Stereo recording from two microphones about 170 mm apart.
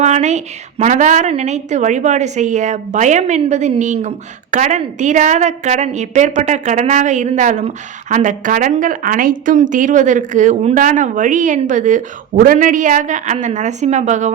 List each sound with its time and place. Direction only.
0.0 s a woman's voice: 45° right (ahead or behind)